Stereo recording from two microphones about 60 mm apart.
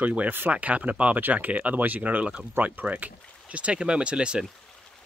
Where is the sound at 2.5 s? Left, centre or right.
Right.